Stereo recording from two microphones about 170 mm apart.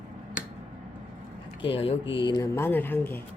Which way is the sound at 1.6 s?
30° left (ahead or behind).